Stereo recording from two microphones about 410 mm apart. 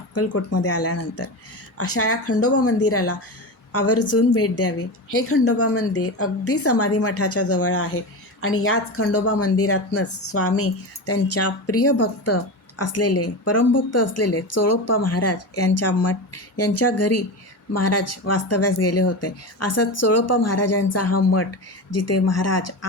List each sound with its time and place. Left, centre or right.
0.1 s a woman's voice: left